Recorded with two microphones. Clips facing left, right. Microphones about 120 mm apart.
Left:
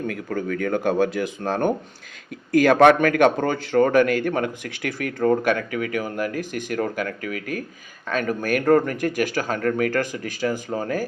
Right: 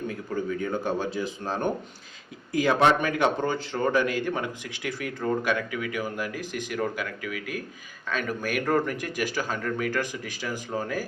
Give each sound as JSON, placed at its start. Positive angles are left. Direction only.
{"t": 0.1, "sound": "speech", "side_deg": 65}
{"t": 2.7, "sound": "a man's voice", "side_deg": 60}